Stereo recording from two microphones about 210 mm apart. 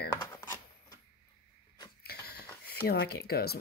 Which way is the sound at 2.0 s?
50° left (ahead or behind).